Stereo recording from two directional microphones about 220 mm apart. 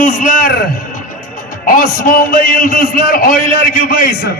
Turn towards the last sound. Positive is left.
turn(degrees=40)  # may be behind; listen again after turning